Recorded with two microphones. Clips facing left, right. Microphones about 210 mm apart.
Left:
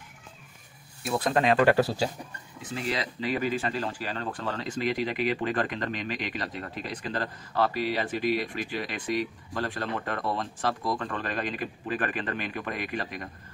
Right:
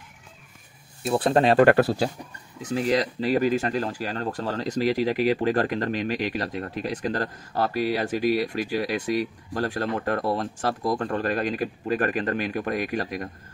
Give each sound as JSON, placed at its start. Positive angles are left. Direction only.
{"t": 1.0, "sound": "speech", "side_deg": -30}
{"t": 1.6, "sound": "speech", "side_deg": -55}
{"t": 2.7, "sound": "speech", "side_deg": -40}